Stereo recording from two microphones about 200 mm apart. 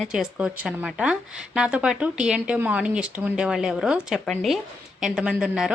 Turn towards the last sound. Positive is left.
turn(degrees=-5)  # may be behind; listen again after turning